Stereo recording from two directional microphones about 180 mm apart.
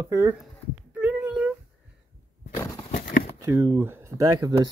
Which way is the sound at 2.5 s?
20° left (ahead or behind).